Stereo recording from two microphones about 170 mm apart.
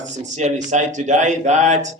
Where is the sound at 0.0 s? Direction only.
45° right (ahead or behind).